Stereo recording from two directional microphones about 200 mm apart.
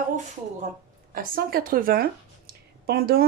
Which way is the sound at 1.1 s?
45° right (ahead or behind).